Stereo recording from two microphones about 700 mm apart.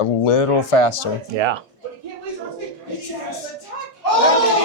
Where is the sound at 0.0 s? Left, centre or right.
Left.